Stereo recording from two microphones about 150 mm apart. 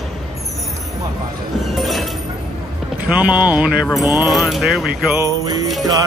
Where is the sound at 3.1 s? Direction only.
10° right (ahead or behind).